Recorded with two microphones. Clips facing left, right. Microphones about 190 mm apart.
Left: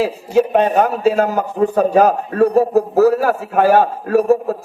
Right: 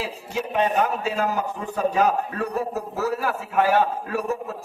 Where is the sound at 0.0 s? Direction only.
50° left (ahead or behind).